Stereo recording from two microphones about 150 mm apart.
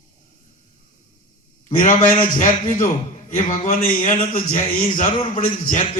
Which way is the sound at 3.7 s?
65° left (ahead or behind).